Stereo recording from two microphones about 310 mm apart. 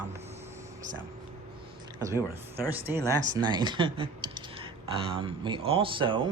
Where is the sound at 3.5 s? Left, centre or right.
Centre.